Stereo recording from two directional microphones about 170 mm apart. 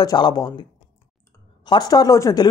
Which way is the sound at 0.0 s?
25° left (ahead or behind).